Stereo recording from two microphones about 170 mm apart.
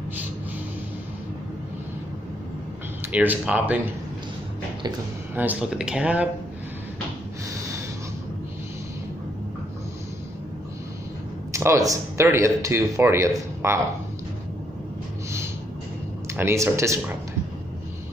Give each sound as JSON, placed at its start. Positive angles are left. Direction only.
{"t": 3.0, "sound": "speech", "side_deg": -10}
{"t": 5.3, "sound": "speech", "side_deg": -10}
{"t": 11.5, "sound": "speech", "side_deg": -20}
{"t": 16.3, "sound": "speech", "side_deg": -15}